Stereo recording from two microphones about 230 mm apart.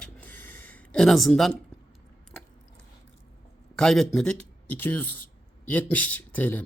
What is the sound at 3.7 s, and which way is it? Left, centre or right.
Speech, centre.